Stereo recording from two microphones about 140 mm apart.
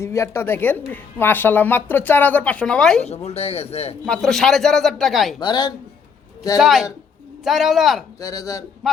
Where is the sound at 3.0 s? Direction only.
50° left (ahead or behind).